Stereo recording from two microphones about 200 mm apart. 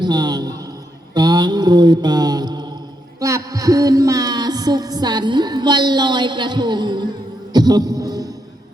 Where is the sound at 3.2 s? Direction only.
15° right (ahead or behind).